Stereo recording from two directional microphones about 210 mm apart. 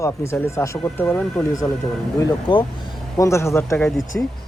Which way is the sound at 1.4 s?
15° left (ahead or behind).